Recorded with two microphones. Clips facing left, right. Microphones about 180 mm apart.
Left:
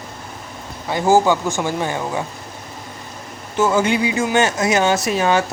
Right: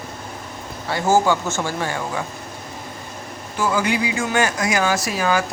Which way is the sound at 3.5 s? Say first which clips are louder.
Left 4 dB; 25° left (ahead or behind).